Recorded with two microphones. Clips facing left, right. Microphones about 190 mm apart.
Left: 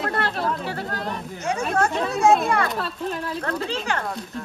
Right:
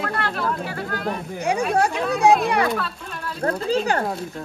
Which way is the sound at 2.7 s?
35° left (ahead or behind).